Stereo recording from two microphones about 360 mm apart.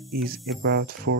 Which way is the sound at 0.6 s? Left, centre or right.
Right.